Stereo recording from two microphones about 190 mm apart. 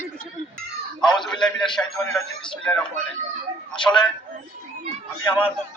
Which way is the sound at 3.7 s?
25° left (ahead or behind).